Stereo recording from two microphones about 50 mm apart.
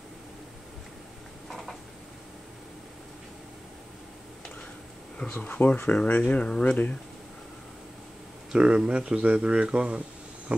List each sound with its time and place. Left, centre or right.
5.2 s speech: centre
5.9 s speech: left
8.5 s speech: right